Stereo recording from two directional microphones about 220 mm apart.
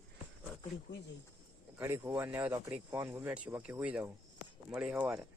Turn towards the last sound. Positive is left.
turn(degrees=-5)  # may be behind; listen again after turning